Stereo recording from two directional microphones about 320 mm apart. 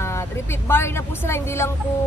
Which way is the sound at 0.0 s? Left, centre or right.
Centre.